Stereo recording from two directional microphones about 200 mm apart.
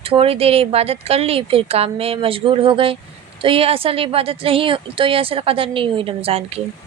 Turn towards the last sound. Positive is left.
turn(degrees=-30)  # may be behind; listen again after turning